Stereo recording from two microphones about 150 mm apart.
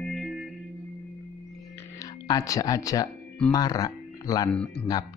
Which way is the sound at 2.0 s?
25° left (ahead or behind).